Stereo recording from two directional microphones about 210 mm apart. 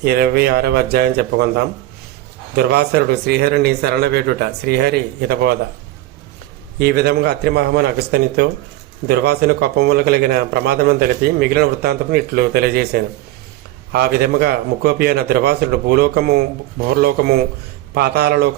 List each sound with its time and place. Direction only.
0.0 s a man's voice: 50° right (ahead or behind)
6.7 s a man's voice: 50° right (ahead or behind)